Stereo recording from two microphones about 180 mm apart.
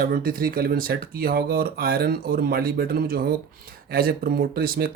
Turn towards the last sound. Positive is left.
turn(degrees=-55)  # may be behind; listen again after turning